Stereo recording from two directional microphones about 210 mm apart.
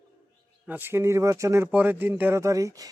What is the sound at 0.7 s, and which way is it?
Speech, 10° right (ahead or behind).